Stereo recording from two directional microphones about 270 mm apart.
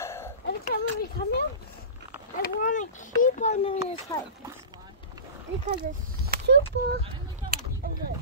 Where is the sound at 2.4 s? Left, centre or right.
Left.